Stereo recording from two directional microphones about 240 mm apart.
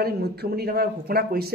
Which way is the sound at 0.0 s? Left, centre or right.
Right.